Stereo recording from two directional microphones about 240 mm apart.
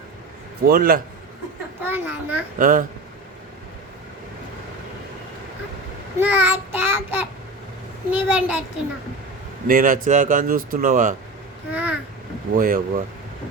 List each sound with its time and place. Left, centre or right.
0.7 s speech: right
1.8 s child singing: centre
2.6 s speech: right
6.1 s child singing: centre
8.1 s a child's voice: centre
9.6 s speech: right
11.7 s child singing: centre
12.5 s speech: right